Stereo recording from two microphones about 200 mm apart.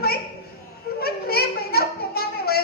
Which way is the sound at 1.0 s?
50° left (ahead or behind).